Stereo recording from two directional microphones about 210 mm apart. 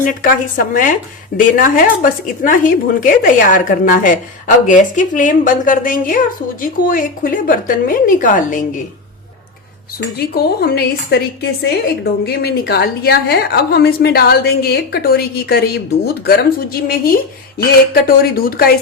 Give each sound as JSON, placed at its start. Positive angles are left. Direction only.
{"t": 0.0, "sound": "a woman's voice", "side_deg": 40}
{"t": 10.2, "sound": "a woman's voice", "side_deg": 50}